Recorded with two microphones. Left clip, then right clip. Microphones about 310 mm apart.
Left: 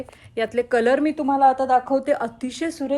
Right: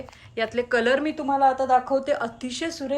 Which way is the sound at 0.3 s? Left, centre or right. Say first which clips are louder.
Left 3 dB; centre.